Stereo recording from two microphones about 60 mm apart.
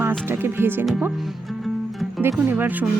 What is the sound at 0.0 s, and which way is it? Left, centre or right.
Music, right.